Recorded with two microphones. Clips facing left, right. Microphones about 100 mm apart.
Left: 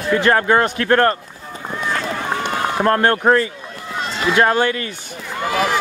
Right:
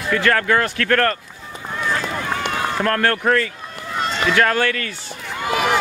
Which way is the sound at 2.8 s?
25° left (ahead or behind).